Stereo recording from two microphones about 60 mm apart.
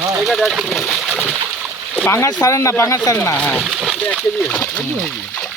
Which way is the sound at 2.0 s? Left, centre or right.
Left.